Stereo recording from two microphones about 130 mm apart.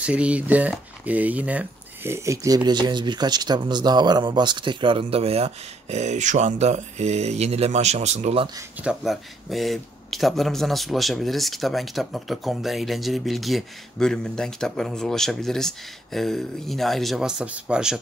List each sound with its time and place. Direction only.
0.0 s speech: 10° right (ahead or behind); by 8.5 s 55° right (ahead or behind)
8.8 s speech: centre (ahead or behind)